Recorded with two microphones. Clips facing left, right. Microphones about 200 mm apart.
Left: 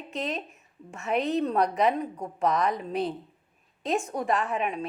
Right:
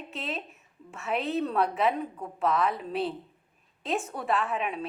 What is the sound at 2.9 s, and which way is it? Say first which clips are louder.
Speech: left 1 dB; 40° left (ahead or behind).